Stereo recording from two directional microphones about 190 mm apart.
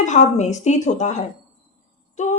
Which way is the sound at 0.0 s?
40° left (ahead or behind).